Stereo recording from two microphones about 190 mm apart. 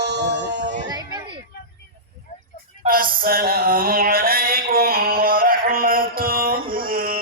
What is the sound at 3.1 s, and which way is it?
Mantra, 50° right (ahead or behind).